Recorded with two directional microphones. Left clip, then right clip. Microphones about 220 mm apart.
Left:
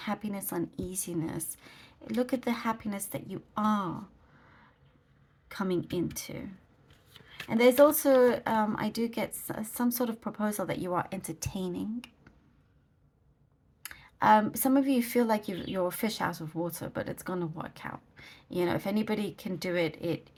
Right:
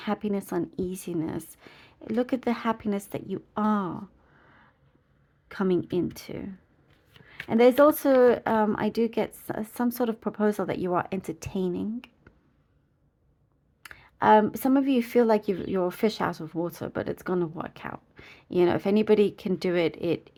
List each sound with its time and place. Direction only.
0.0 s speech: 35° right (ahead or behind)
5.5 s speech: 35° right (ahead or behind)
13.8 s speech: 30° right (ahead or behind)